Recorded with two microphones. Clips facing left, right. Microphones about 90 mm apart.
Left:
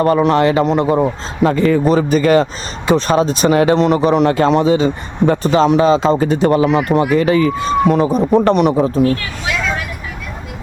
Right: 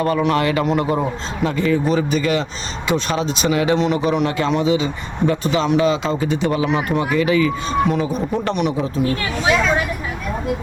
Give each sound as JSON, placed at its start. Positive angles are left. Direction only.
{"t": 0.0, "sound": "speech", "side_deg": 35}
{"t": 1.5, "sound": "speech", "side_deg": 45}